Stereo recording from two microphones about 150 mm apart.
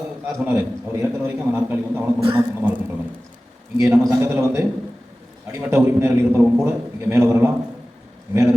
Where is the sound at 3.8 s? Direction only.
15° right (ahead or behind).